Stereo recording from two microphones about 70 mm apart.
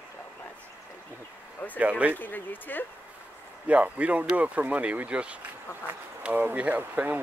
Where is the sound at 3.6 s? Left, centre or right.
Centre.